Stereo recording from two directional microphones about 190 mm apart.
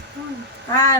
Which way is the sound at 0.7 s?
15° left (ahead or behind).